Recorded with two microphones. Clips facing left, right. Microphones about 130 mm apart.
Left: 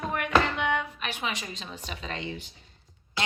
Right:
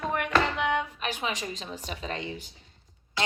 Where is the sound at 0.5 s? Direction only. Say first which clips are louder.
Right 1 dB; 35° right (ahead or behind).